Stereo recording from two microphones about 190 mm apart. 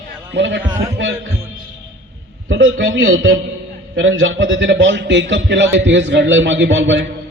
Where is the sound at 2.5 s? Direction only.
85° right.